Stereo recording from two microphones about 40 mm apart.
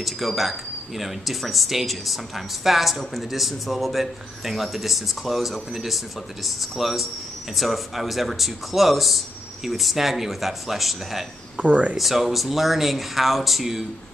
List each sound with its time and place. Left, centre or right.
0.0 s speech: centre
11.5 s speech: right
12.0 s speech: centre